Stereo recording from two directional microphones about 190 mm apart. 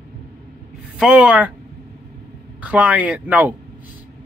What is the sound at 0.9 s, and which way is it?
Speech, 5° right (ahead or behind).